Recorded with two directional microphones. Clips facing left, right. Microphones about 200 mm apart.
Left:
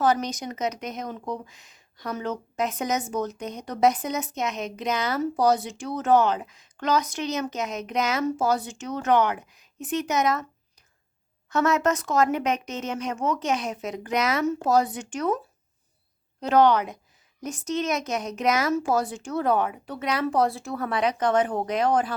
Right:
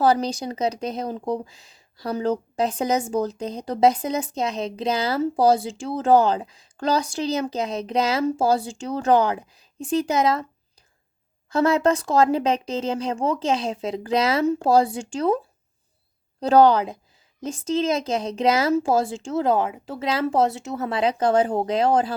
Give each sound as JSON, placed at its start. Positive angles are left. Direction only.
{"t": 0.0, "sound": "speech", "side_deg": -30}
{"t": 11.4, "sound": "speech", "side_deg": -30}
{"t": 16.4, "sound": "speech", "side_deg": -35}